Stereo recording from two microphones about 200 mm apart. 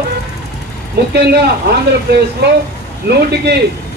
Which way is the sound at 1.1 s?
55° right (ahead or behind).